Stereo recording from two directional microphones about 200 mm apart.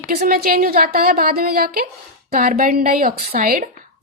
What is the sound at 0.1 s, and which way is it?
A woman's voice, 45° right (ahead or behind).